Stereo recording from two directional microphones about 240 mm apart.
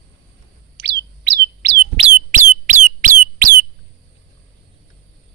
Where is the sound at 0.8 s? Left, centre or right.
Right.